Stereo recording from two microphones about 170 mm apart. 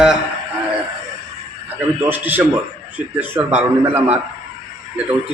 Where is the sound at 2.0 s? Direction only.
10° right (ahead or behind).